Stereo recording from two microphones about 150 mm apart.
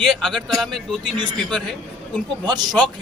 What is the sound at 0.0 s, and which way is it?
A man's voice, 5° left (ahead or behind).